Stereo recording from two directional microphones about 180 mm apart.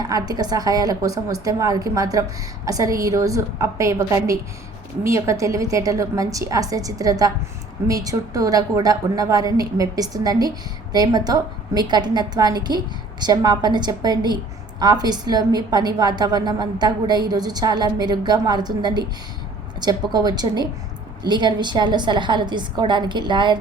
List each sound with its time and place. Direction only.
0.0 s a woman's voice: 20° right (ahead or behind)